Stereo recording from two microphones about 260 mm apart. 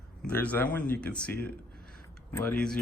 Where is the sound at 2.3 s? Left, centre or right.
Centre.